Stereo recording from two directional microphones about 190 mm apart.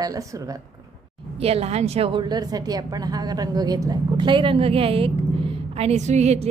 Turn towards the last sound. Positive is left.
turn(degrees=-35)  # may be behind; listen again after turning